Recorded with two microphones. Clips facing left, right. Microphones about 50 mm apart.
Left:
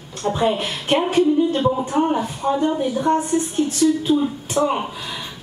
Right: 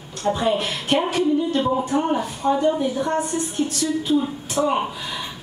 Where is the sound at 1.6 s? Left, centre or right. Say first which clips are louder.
Left 2 dB; centre.